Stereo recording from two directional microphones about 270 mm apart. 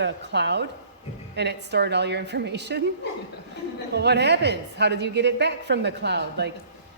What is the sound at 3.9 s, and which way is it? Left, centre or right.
Speech, right.